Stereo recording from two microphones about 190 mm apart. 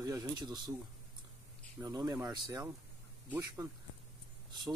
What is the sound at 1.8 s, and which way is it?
Speech, 15° right (ahead or behind).